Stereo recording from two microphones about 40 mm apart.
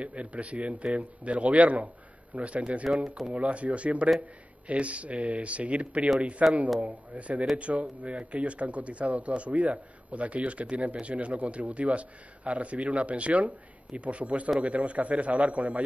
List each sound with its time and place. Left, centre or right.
0.0 s speech: right